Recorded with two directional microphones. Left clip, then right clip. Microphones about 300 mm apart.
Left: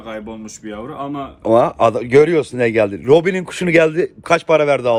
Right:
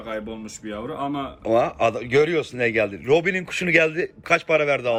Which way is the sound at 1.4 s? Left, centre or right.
Centre.